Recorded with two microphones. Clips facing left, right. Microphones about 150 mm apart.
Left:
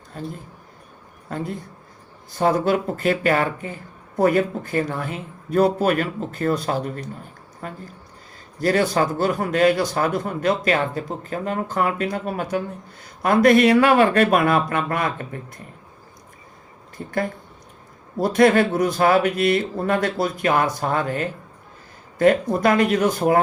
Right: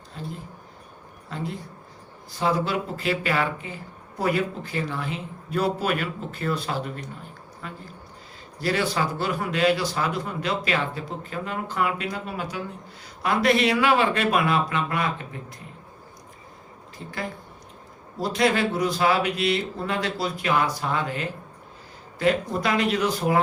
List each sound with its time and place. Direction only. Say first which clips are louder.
0.1 s speech: left 5 dB; 50° left (ahead or behind)
1.3 s speech: left 4 dB; 50° left (ahead or behind)
18.2 s speech: left 7 dB; 50° left (ahead or behind)